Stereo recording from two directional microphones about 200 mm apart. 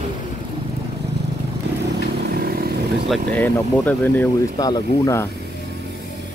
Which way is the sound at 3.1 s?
10° left (ahead or behind).